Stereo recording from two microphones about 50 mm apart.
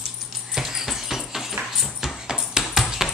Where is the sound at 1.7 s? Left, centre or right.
Centre.